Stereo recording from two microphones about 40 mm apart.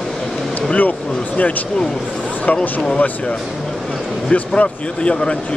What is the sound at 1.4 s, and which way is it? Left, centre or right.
Speech, left.